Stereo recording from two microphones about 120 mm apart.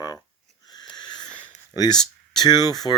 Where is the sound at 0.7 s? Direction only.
35° left (ahead or behind).